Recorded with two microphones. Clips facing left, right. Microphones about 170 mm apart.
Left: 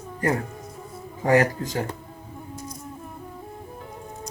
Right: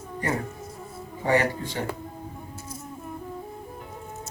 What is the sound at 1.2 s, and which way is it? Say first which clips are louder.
Speech: left 4 dB; 40° left (ahead or behind).